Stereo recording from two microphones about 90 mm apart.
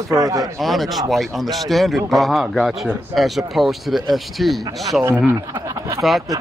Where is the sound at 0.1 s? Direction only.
40° right (ahead or behind).